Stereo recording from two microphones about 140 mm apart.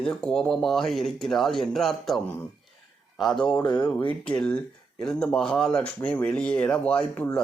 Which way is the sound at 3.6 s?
30° left (ahead or behind).